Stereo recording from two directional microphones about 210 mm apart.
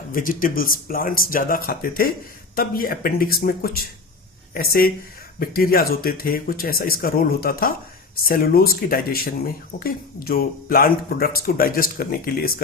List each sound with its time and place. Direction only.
0.1 s speech: 40° left (ahead or behind)